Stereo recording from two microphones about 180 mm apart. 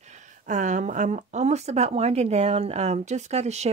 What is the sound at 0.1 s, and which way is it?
Speech, 40° right (ahead or behind).